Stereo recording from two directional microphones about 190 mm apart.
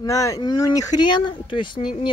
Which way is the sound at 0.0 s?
15° left (ahead or behind).